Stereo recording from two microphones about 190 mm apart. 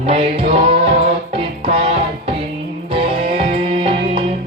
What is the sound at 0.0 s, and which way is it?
Music, 30° right (ahead or behind).